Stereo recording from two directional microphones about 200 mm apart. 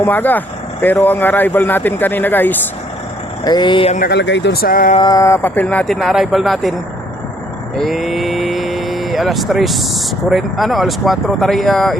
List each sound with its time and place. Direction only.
0.0 s speech: 10° left (ahead or behind)
3.4 s speech: 20° left (ahead or behind)
3.9 s speech: 50° left (ahead or behind)
4.9 s speech: 20° left (ahead or behind); by 6.7 s centre (ahead or behind)
7.8 s speech: centre (ahead or behind)